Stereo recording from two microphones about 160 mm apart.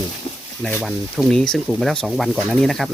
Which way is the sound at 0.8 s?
Centre (ahead or behind).